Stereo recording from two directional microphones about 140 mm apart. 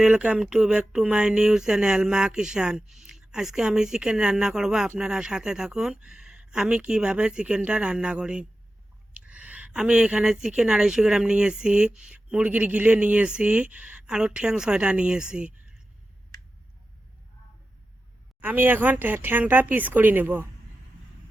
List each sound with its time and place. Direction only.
0.0 s speech: 10° right (ahead or behind)
18.3 s speech: 15° right (ahead or behind)